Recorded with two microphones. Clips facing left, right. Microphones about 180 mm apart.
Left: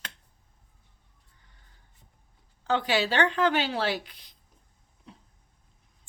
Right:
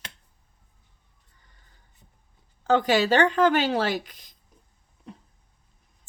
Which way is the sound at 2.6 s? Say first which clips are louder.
Right 5 dB; 45° right (ahead or behind).